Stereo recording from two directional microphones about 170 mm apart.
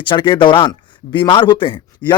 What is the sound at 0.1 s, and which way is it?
Speech, 30° left (ahead or behind).